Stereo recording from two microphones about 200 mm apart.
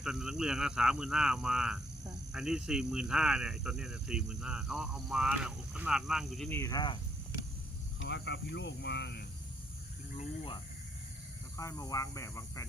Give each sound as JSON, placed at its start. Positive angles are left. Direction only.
{"t": 0.0, "sound": "speech", "side_deg": 0}
{"t": 6.5, "sound": "speech", "side_deg": 15}
{"t": 7.9, "sound": "speech", "side_deg": 60}
{"t": 10.2, "sound": "speech", "side_deg": 25}